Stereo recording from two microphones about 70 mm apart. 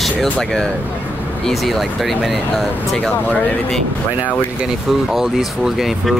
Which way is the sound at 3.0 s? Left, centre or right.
Left.